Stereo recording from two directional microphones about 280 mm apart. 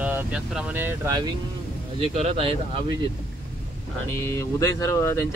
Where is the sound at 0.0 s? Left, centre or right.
Centre.